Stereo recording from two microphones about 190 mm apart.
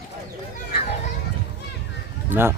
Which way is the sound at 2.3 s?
10° right (ahead or behind).